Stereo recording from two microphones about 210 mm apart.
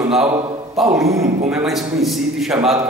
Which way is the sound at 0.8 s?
Centre (ahead or behind).